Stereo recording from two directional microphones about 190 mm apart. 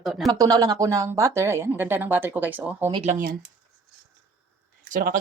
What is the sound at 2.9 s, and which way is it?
Speech, 30° right (ahead or behind).